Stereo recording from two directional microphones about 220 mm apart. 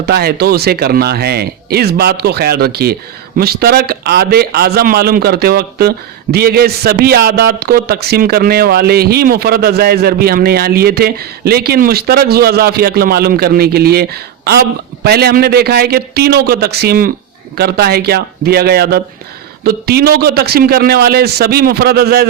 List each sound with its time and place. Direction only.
0.0 s a man's voice: 45° right (ahead or behind)